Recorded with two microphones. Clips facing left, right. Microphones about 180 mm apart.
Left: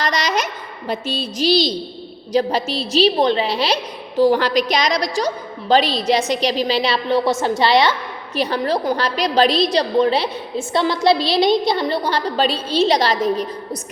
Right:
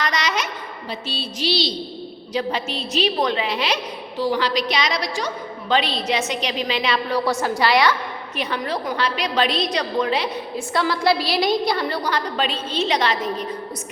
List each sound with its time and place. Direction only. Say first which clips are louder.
0.0 s a sound: left 3 dB; 35° left (ahead or behind)
0.9 s music: left 7 dB; 45° left (ahead or behind)
2.3 s a woman's voice: left 6 dB; 40° left (ahead or behind)
4.2 s a woman's voice: left 7 dB; 50° left (ahead or behind)